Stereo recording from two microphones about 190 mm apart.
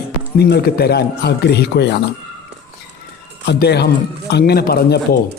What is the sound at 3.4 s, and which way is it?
A man's voice, 60° left (ahead or behind).